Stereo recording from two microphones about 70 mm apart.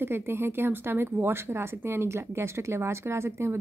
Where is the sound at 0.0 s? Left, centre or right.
Right.